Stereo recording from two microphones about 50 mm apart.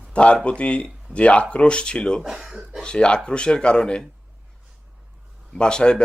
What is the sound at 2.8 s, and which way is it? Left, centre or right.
Speech, centre.